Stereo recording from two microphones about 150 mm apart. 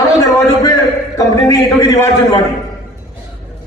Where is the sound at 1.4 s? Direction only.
20° left (ahead or behind).